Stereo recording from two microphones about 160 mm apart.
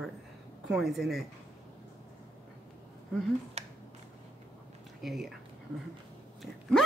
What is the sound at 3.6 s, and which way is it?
Finger snapping, 40° right (ahead or behind).